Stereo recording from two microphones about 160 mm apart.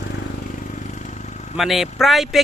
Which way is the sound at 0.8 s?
50° left (ahead or behind).